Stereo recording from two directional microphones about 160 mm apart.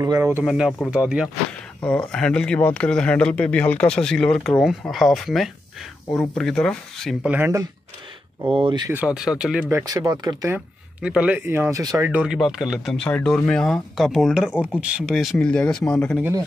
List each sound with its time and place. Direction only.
0.0 s speech: 20° right (ahead or behind)
0.4 s speech: 5° right (ahead or behind)
1.8 s speech: 5° left (ahead or behind)
7.2 s speech: 10° right (ahead or behind)
8.5 s speech: 35° right (ahead or behind)
8.8 s speech: 10° right (ahead or behind)
9.7 s speech: 15° right (ahead or behind)
10.5 s speech: 5° right (ahead or behind)
12.1 s speech: 5° right (ahead or behind)